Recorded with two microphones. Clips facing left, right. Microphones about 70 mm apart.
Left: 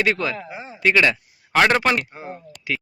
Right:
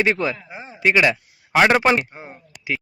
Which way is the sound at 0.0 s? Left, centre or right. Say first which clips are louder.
Right 1 dB; right.